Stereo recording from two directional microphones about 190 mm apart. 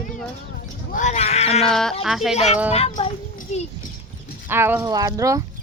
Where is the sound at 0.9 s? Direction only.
40° left (ahead or behind).